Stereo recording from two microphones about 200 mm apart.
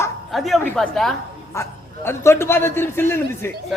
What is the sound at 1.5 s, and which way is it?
A man's voice, 15° left (ahead or behind).